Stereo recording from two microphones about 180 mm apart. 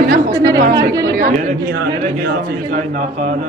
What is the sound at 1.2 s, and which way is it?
Speech, 50° right (ahead or behind).